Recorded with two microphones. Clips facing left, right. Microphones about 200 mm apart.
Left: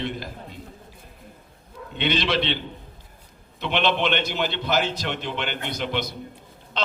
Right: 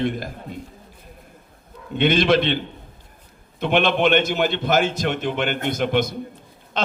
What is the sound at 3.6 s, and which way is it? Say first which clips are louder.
A man's voice: right 5 dB; 50° right (ahead or behind).